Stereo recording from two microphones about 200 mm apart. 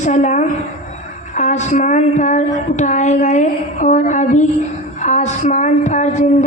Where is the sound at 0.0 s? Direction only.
35° left (ahead or behind).